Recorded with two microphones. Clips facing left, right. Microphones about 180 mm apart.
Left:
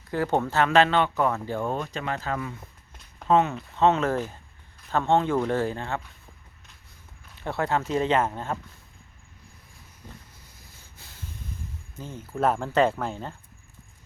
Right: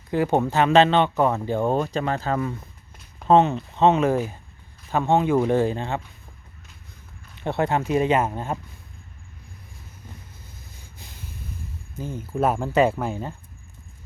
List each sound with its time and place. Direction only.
0.1 s speech: 15° right (ahead or behind)
1.7 s speech: 35° right (ahead or behind); by 6.0 s 20° right (ahead or behind)
7.3 s speech: 20° right (ahead or behind)
10.6 s snort: 15° right (ahead or behind)
11.9 s speech: 10° right (ahead or behind)